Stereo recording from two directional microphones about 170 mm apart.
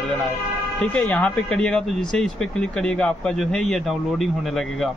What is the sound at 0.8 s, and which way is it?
Speech, 5° left (ahead or behind).